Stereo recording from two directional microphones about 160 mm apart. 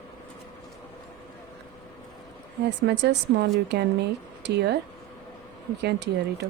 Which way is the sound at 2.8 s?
90° right.